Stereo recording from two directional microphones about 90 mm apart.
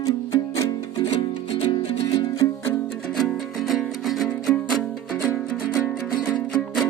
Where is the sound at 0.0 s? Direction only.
40° left (ahead or behind).